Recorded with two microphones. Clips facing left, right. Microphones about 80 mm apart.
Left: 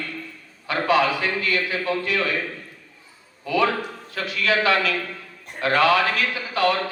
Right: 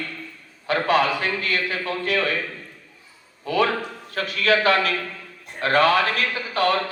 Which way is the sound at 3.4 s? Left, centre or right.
Right.